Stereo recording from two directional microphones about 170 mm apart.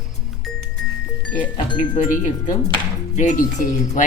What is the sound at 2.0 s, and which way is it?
Speech, 50° left (ahead or behind).